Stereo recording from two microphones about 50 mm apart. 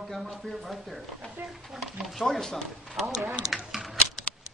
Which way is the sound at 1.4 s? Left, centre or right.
Right.